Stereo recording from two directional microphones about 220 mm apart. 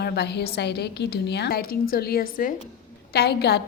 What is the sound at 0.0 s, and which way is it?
Speech, 50° left (ahead or behind).